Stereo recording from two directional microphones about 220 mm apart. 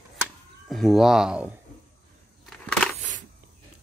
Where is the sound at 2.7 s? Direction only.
5° left (ahead or behind).